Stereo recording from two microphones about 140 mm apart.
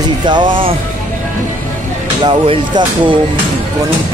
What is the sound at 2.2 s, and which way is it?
Speech, 35° right (ahead or behind).